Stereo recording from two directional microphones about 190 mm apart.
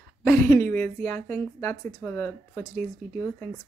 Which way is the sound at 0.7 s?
10° left (ahead or behind).